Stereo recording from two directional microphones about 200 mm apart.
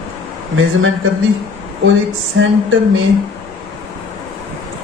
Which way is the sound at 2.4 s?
70° right (ahead or behind).